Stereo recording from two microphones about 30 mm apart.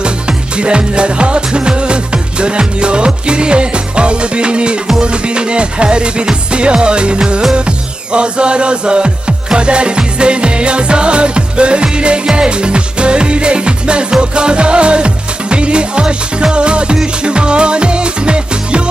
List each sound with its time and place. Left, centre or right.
0.0 s music: right